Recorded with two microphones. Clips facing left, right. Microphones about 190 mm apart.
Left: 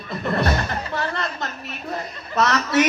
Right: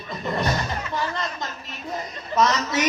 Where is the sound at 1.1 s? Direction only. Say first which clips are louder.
Left 2 dB; 65° left (ahead or behind).